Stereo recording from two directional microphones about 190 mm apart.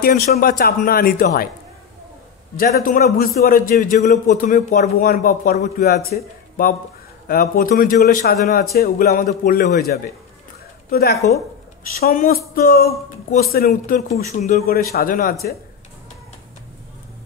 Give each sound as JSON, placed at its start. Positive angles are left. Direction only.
{"t": 0.0, "sound": "a man's voice", "side_deg": 50}
{"t": 2.5, "sound": "a man's voice", "side_deg": 45}
{"t": 14.6, "sound": "a man's voice", "side_deg": 55}